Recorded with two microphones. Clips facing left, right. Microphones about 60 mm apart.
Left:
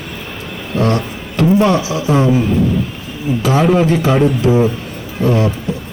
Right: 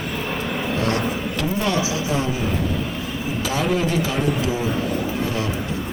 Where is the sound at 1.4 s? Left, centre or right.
Left.